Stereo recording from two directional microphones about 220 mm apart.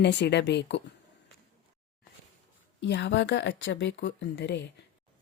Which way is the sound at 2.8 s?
50° left (ahead or behind).